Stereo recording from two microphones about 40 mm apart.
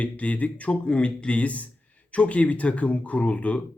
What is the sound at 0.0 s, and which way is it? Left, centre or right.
Speech, left.